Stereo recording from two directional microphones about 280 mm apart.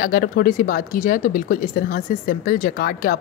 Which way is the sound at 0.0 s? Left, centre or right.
Left.